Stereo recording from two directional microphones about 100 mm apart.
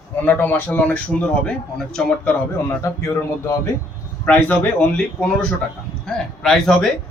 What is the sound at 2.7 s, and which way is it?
Speech, 30° left (ahead or behind).